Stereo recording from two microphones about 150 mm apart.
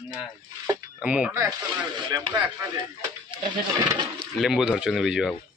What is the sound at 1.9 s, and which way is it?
Speech, 30° right (ahead or behind).